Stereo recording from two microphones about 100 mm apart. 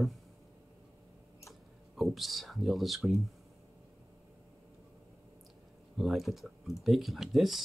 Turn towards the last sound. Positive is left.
turn(degrees=0)  # may be behind; listen again after turning